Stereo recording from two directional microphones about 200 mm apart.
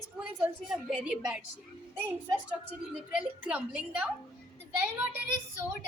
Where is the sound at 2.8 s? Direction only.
5° right (ahead or behind).